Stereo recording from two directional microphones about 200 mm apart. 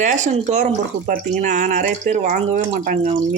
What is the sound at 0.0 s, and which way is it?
Speech, 35° right (ahead or behind).